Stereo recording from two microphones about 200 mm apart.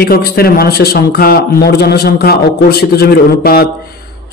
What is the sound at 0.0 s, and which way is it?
Speech, 50° left (ahead or behind).